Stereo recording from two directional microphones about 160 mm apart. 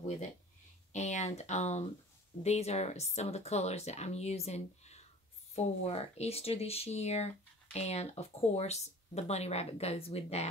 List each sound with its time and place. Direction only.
0.9 s speech: 45° left (ahead or behind)